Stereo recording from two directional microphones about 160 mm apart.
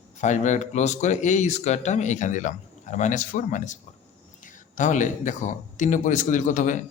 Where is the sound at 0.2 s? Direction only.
50° left (ahead or behind).